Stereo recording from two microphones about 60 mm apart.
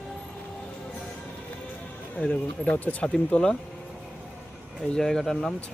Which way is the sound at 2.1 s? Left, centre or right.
Centre.